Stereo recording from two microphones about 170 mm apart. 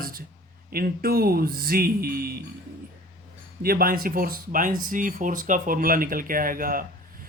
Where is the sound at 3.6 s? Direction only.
60° right (ahead or behind).